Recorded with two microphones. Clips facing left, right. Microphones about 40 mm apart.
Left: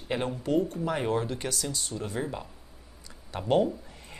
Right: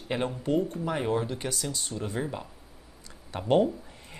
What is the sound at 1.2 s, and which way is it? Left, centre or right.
Speech, centre.